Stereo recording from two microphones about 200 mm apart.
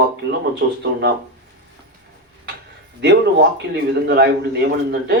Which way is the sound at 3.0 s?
55° right (ahead or behind).